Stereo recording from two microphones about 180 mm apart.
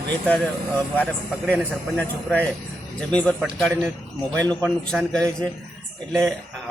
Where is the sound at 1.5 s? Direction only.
5° left (ahead or behind).